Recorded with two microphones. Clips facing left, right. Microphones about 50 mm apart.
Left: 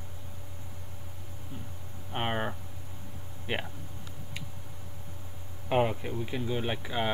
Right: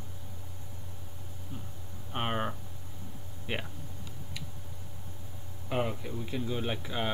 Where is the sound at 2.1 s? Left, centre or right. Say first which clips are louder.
Left 1 dB; centre.